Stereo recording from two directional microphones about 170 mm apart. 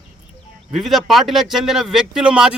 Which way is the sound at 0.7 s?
Centre (ahead or behind).